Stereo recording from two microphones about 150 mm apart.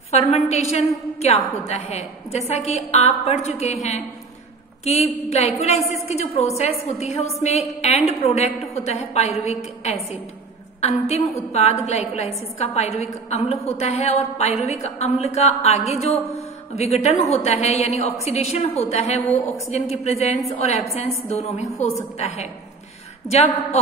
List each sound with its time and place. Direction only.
0.1 s a woman's voice: 45° left (ahead or behind)
5.3 s a woman's voice: 45° left (ahead or behind)
10.8 s a woman's voice: 45° left (ahead or behind)